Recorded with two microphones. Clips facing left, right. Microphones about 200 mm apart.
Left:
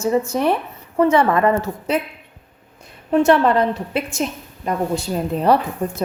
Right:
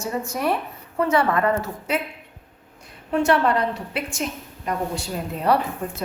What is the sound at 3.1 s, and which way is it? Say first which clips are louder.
Speech: left 5 dB; 25° left (ahead or behind).